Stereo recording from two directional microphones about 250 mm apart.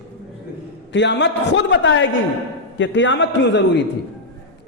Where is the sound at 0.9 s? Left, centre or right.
Left.